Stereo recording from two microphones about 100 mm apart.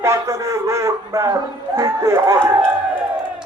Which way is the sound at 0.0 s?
30° right (ahead or behind).